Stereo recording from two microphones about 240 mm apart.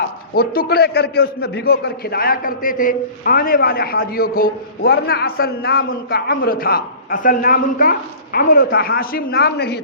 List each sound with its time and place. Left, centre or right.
0.3 s a man's voice: left